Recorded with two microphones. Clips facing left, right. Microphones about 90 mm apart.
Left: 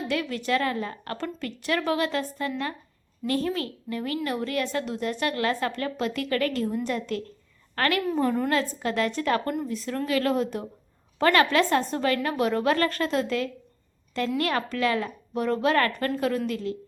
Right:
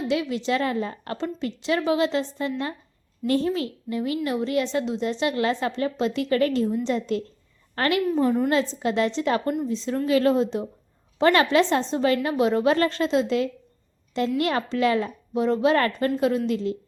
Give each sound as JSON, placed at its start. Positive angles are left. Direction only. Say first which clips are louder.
{"t": 0.1, "sound": "a woman's voice", "louder": "right 2 dB", "side_deg": -20}
{"t": 8.2, "sound": "a woman's voice", "louder": "right 3 dB", "side_deg": -5}
{"t": 8.4, "sound": "a woman's voice", "louder": "right 3 dB", "side_deg": -25}